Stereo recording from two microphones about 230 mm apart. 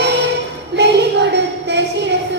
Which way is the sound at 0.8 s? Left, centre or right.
Right.